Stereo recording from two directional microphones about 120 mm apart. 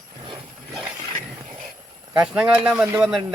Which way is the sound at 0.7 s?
5° right (ahead or behind).